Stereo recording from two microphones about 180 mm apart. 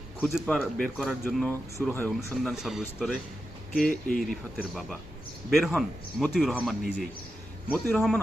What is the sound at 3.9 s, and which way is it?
Speech, 50° left (ahead or behind).